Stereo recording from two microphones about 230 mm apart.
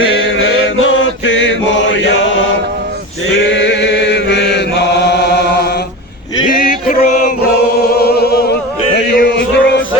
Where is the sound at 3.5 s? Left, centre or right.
Left.